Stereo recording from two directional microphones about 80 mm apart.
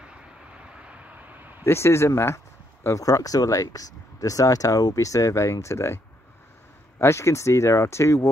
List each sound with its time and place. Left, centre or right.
0.7 s a sound: centre
1.6 s speech: left
7.0 s speech: left